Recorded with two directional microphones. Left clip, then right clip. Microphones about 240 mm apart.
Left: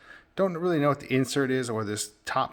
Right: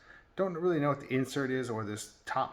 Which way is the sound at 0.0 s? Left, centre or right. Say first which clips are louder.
Left 6 dB; left.